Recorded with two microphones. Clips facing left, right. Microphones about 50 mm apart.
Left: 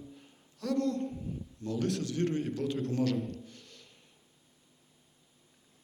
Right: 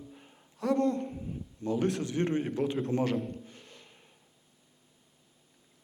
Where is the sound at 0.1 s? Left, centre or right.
Right.